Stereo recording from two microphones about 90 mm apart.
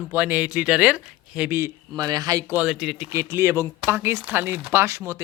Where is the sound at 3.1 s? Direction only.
35° right (ahead or behind).